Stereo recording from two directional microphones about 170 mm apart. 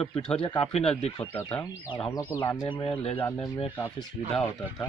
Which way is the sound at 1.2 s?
15° left (ahead or behind).